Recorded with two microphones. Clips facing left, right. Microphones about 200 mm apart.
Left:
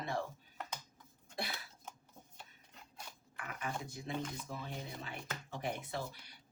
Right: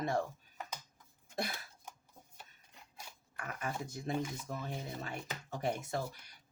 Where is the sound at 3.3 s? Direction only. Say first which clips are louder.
Right 2 dB; 45° right (ahead or behind).